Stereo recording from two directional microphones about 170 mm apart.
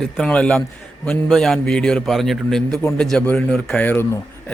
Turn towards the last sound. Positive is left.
turn(degrees=10)  # may be behind; listen again after turning